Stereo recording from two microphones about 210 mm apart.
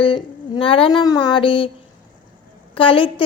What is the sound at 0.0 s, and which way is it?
A child's voice, 25° left (ahead or behind).